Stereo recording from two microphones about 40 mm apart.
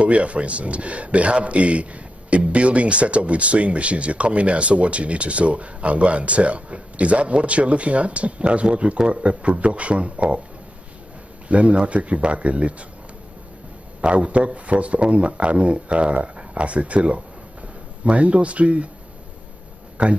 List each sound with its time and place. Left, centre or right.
0.0 s a man's voice: right
11.4 s a man's voice: right
14.0 s a man's voice: right
20.0 s speech: right